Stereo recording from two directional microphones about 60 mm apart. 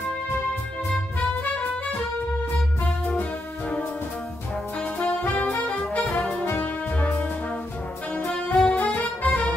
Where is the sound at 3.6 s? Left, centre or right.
Left.